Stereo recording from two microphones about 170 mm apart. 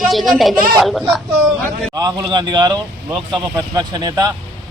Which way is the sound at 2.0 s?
25° right (ahead or behind).